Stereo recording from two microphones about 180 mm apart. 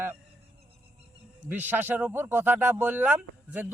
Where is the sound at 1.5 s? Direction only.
10° right (ahead or behind).